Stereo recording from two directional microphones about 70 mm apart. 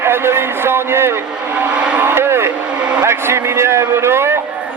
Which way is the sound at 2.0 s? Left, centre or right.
Right.